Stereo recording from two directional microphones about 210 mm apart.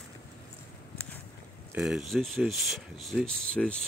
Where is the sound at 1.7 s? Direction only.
Centre (ahead or behind).